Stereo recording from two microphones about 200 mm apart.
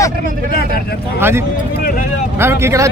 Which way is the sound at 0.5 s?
50° left (ahead or behind).